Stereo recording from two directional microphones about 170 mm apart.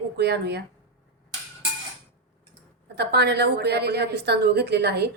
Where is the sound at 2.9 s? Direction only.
75° right (ahead or behind).